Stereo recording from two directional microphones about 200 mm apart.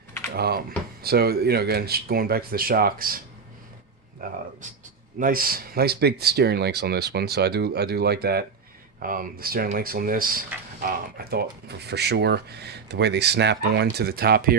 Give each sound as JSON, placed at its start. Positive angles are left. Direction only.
{"t": 0.3, "sound": "speech", "side_deg": -50}
{"t": 4.2, "sound": "speech", "side_deg": -45}